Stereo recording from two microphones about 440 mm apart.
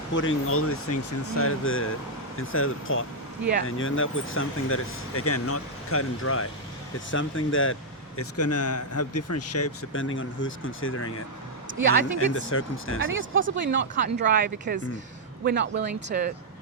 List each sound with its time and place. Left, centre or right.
0.1 s speech: left
12.2 s speech: left
13.1 s speech: right